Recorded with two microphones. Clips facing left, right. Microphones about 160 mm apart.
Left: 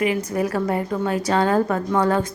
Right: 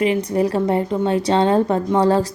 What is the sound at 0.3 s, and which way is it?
Speech, 30° right (ahead or behind).